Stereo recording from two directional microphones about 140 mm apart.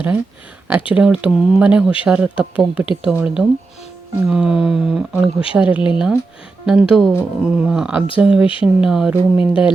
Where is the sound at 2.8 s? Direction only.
40° left (ahead or behind).